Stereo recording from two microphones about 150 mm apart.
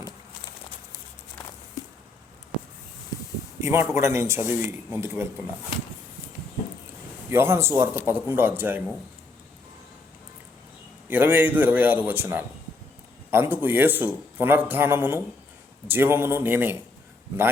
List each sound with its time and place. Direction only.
3.6 s a man's voice: 15° right (ahead or behind)
7.3 s a man's voice: 15° right (ahead or behind)
11.1 s a man's voice: 15° right (ahead or behind)